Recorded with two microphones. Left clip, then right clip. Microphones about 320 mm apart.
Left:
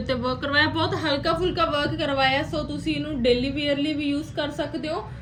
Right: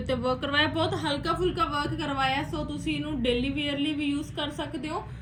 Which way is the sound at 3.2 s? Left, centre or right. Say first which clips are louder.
Left 7 dB; centre.